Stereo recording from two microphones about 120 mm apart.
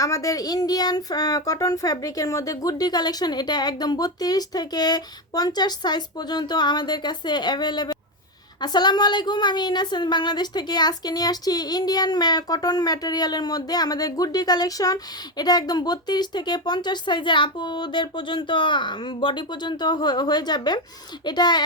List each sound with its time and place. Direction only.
0.0 s a woman's voice: 30° left (ahead or behind)